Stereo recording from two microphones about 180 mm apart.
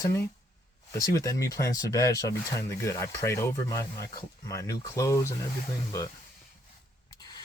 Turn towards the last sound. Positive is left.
turn(degrees=20)  # may be behind; listen again after turning